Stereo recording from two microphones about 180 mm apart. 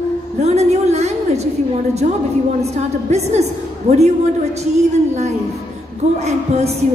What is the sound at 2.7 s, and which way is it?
A woman's voice, 35° right (ahead or behind).